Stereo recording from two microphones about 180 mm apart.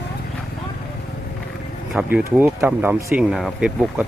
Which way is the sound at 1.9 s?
5° right (ahead or behind).